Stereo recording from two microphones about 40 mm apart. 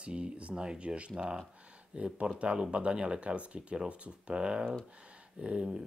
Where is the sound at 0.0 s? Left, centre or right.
Right.